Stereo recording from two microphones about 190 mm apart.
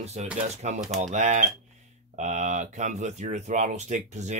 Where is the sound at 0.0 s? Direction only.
35° right (ahead or behind).